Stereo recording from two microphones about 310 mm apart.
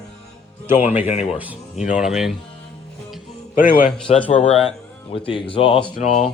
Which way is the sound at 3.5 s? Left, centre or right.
Left.